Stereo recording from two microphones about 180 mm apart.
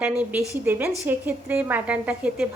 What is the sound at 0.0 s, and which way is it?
A woman's voice, 10° right (ahead or behind).